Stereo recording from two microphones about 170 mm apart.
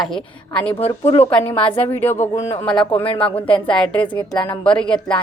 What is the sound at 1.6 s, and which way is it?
Speech, 10° left (ahead or behind).